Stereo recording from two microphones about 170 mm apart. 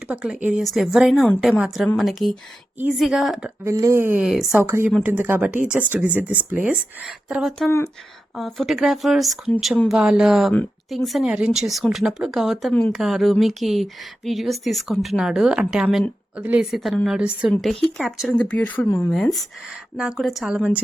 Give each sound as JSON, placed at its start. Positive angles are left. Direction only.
{"t": 0.1, "sound": "speech", "side_deg": -5}
{"t": 3.6, "sound": "a woman's voice", "side_deg": -15}
{"t": 4.2, "sound": "speech", "side_deg": 0}
{"t": 4.6, "sound": "a woman's voice", "side_deg": -15}
{"t": 19.1, "sound": "speech", "side_deg": 0}